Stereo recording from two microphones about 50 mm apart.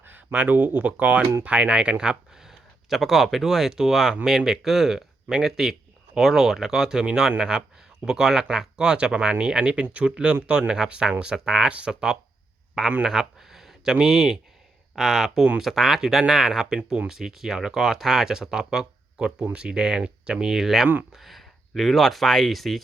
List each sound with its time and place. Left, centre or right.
0.0 s speech: right; by 2.5 s centre
2.5 s a sound: centre
3.3 s speech: centre
11.7 s speech: right
13.1 s a sound: centre
14.0 s speech: centre